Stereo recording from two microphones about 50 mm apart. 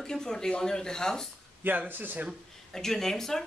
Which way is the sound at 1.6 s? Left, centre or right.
Right.